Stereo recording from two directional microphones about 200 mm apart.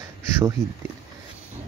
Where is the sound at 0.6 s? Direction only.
Centre (ahead or behind).